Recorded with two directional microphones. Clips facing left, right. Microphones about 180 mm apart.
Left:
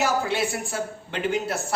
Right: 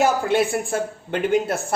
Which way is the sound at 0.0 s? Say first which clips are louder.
Right 5 dB; 50° right (ahead or behind).